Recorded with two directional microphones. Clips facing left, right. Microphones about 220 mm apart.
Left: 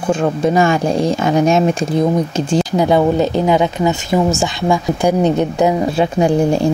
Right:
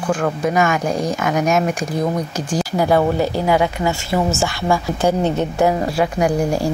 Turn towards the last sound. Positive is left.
turn(degrees=25)  # may be behind; listen again after turning